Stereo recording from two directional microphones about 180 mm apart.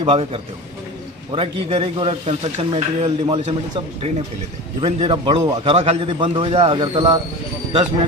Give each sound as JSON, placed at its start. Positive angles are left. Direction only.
{"t": 0.0, "sound": "a man's voice", "side_deg": -30}